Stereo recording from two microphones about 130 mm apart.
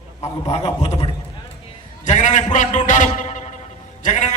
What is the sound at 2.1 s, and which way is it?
A man's voice, 70° left (ahead or behind).